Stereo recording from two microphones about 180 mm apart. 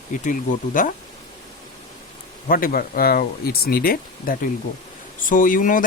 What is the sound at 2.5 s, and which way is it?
Speech, 50° left (ahead or behind).